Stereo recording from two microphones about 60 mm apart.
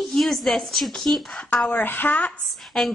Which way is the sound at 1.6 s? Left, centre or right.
Left.